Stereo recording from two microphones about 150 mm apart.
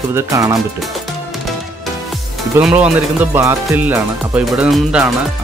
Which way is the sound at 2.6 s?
5° right (ahead or behind).